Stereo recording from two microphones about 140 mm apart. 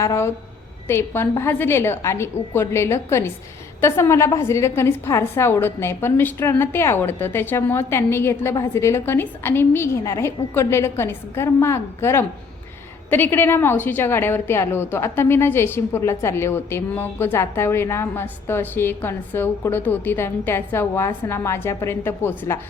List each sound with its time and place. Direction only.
0.0 s a woman's voice: 20° left (ahead or behind)